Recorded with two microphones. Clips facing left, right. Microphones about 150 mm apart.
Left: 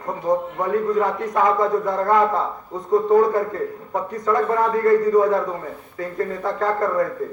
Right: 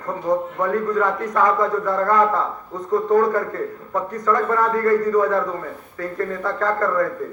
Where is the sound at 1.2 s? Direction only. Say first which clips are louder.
Even; 10° left (ahead or behind).